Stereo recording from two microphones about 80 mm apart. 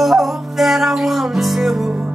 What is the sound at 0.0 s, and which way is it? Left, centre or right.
Music, centre.